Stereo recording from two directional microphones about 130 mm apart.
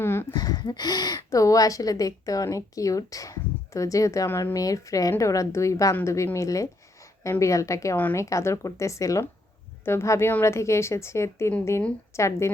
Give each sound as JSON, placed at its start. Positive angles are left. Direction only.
{"t": 0.0, "sound": "speech", "side_deg": 20}
{"t": 0.3, "sound": "speech", "side_deg": 30}